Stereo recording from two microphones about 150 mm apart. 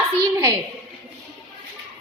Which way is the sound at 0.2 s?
20° right (ahead or behind).